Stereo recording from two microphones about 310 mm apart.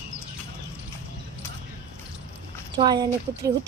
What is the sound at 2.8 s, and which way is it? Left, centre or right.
Speech, centre.